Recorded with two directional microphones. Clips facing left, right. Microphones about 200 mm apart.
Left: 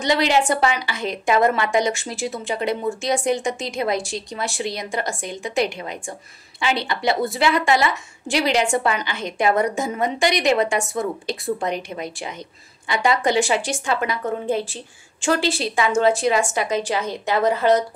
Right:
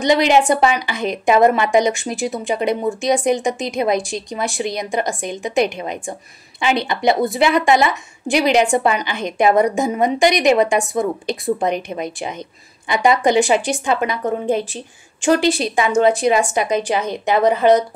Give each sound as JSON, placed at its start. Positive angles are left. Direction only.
{"t": 0.0, "sound": "a woman's voice", "side_deg": -15}